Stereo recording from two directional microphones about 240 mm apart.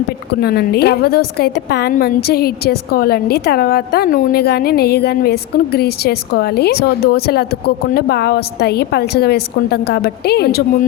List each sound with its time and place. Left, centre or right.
0.3 s a woman's voice: left